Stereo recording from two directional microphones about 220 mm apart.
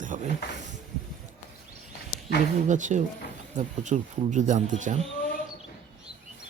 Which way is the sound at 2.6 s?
35° right (ahead or behind).